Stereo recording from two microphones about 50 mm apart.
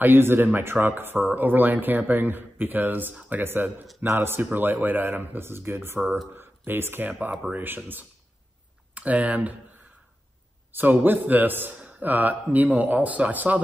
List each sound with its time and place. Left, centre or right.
0.0 s speech: right
4.5 s speech: right
7.1 s speech: right
8.9 s speech: right
10.7 s speech: right